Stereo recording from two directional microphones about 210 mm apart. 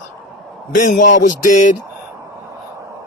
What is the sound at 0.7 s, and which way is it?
A man's voice, 40° left (ahead or behind).